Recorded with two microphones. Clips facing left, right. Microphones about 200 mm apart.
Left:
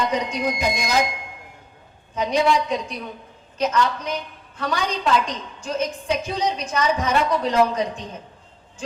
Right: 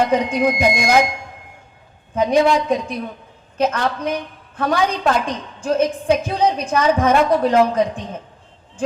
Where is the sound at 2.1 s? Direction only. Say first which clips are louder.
Right 5 dB; 55° right (ahead or behind).